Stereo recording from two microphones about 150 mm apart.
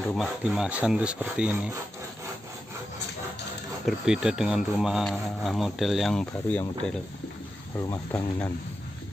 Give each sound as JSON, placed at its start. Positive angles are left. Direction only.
{"t": 0.1, "sound": "speech", "side_deg": 0}
{"t": 3.8, "sound": "speech", "side_deg": -5}
{"t": 7.8, "sound": "speech", "side_deg": 20}